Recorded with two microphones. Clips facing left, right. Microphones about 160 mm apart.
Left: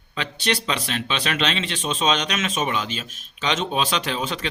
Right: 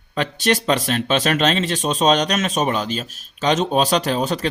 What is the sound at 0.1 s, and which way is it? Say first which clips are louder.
Speech: right 6 dB; 45° right (ahead or behind).